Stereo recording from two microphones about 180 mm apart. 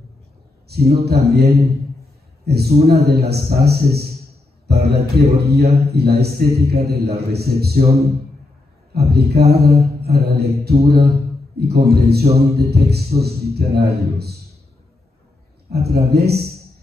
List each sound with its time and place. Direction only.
0.7 s mantra: 60° right (ahead or behind)
8.9 s mantra: 65° right (ahead or behind)
10.9 s a man's voice: 60° right (ahead or behind)
12.4 s mantra: 60° right (ahead or behind)
15.7 s mantra: 60° right (ahead or behind)